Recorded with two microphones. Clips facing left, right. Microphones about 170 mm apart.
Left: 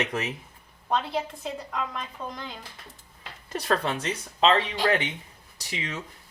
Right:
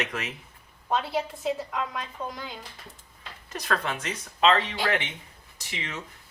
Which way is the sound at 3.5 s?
30° left (ahead or behind).